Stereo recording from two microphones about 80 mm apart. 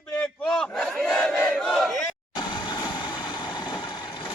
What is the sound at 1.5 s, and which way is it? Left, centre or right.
Crowd, centre.